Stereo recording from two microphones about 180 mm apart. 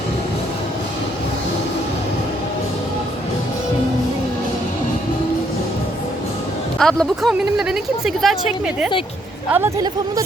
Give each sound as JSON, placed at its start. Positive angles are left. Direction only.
{"t": 6.7, "sound": "speech", "side_deg": 0}
{"t": 9.5, "sound": "speech", "side_deg": -10}